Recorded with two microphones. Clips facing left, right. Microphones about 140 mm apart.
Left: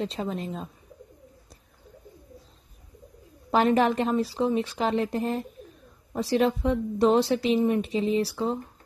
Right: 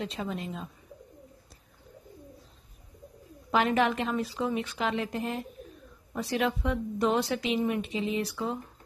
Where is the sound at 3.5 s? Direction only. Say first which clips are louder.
Left 4 dB; 40° left (ahead or behind).